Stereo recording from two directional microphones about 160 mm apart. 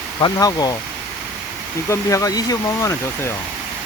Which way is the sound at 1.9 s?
20° left (ahead or behind).